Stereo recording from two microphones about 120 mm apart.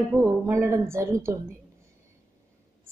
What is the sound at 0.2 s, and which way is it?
A woman's voice, 25° right (ahead or behind).